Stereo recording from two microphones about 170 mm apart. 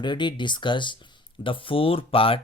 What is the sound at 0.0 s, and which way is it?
Speech, 25° left (ahead or behind).